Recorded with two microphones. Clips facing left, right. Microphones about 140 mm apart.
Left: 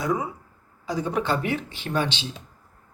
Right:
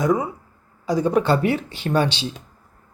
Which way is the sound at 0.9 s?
40° right (ahead or behind).